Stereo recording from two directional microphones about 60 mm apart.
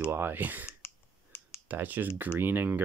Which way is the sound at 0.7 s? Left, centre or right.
Left.